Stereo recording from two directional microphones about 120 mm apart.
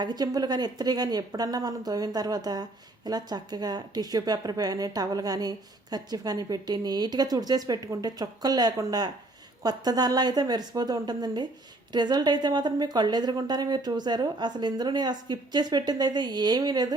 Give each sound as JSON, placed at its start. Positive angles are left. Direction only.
{"t": 0.0, "sound": "a woman's voice", "side_deg": -35}